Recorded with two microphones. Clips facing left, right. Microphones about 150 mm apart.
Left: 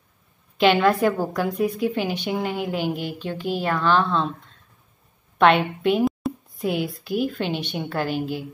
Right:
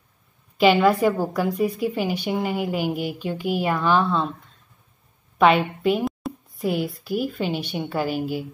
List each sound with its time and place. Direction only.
0.6 s a woman's voice: 5° right (ahead or behind)
5.4 s a woman's voice: 5° right (ahead or behind)